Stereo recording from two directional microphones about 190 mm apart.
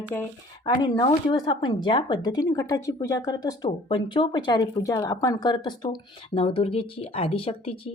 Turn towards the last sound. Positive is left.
turn(degrees=30)  # may be behind; listen again after turning